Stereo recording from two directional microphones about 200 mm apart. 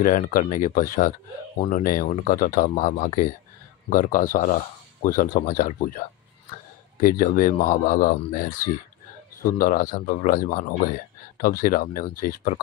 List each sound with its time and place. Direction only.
0.0 s speech: 40° left (ahead or behind)